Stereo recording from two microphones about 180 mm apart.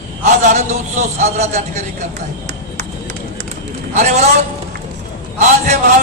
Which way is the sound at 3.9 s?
45° right (ahead or behind).